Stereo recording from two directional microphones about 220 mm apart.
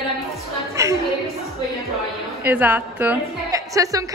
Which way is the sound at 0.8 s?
15° right (ahead or behind).